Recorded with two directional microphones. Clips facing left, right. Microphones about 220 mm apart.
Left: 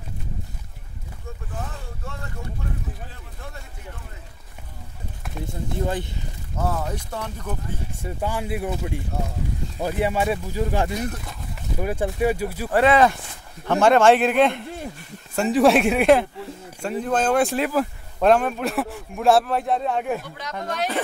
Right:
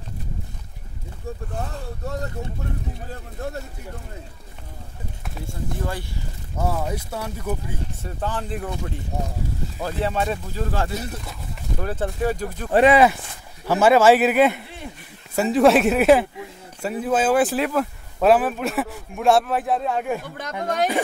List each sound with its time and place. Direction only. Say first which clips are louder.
2.0 s speech: right 7 dB; 40° right (ahead or behind)
5.4 s speech: left 3 dB; 20° left (ahead or behind)
6.6 s speech: right 1 dB; 10° right (ahead or behind)
8.0 s speech: left 2 dB; 10° left (ahead or behind)
12.7 s speech: right 2 dB; 15° right (ahead or behind)
20.6 s speech: right 5 dB; 50° right (ahead or behind)